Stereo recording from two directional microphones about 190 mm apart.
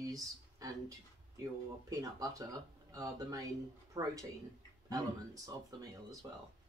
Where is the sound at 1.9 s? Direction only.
20° right (ahead or behind).